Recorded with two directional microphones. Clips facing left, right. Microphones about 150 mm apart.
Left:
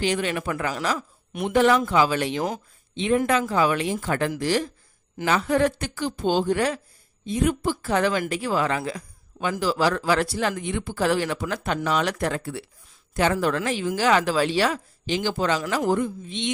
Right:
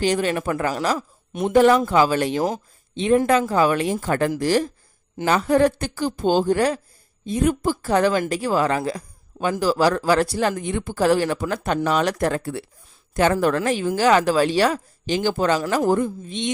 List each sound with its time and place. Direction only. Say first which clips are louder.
0.0 s speech: right 4 dB; 40° right (ahead or behind)